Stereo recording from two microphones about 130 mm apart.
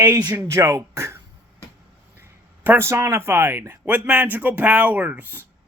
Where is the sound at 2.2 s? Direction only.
20° right (ahead or behind).